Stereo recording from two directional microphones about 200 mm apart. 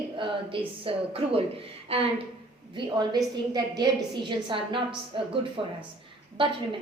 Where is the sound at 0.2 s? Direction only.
25° right (ahead or behind).